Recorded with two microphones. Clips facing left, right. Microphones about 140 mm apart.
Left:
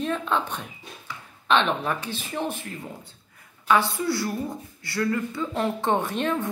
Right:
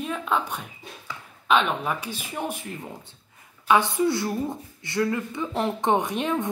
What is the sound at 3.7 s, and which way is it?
A woman's voice, 20° right (ahead or behind).